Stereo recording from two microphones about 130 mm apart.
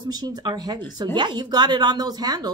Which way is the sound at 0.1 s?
30° right (ahead or behind).